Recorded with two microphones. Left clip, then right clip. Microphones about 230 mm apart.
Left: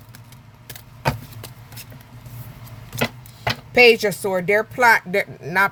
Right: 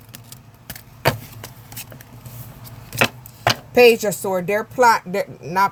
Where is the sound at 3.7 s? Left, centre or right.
Left.